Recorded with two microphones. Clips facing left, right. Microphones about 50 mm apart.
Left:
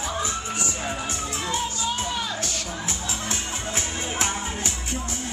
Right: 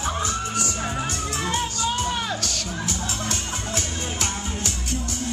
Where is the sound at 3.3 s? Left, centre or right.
Left.